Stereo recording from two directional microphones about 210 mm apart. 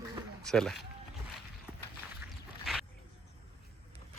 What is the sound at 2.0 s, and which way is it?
Walk, 10° right (ahead or behind).